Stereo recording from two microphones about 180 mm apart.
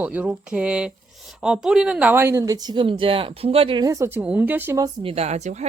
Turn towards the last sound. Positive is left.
turn(degrees=-40)  # may be behind; listen again after turning